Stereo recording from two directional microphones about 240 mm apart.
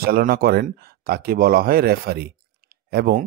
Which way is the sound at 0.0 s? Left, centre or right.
Right.